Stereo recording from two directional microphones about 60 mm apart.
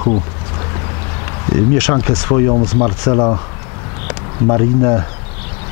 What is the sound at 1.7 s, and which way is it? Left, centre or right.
Speech, left.